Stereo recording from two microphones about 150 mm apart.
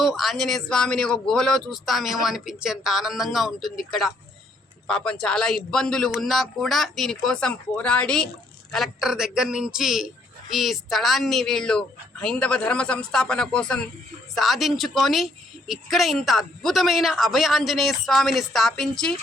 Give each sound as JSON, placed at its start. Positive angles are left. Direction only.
{"t": 0.0, "sound": "a woman's voice", "side_deg": 0}